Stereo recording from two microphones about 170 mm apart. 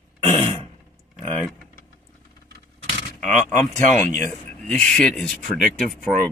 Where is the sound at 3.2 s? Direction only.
10° left (ahead or behind).